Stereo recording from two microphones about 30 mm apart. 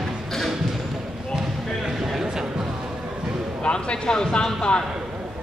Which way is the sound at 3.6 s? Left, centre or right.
Left.